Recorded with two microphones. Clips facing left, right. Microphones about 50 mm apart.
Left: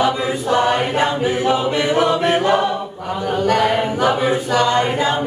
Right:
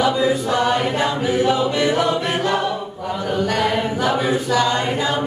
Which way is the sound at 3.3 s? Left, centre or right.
Centre.